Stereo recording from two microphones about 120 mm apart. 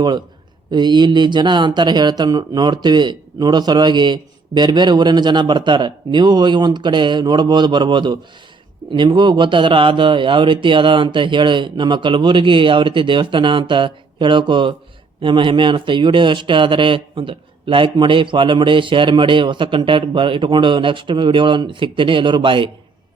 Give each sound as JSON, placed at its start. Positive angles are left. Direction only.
{"t": 0.7, "sound": "speech", "side_deg": -40}